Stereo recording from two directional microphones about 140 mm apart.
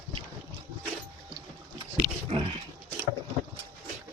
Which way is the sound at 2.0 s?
25° left (ahead or behind).